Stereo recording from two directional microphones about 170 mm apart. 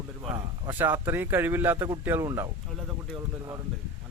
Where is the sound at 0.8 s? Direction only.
10° right (ahead or behind).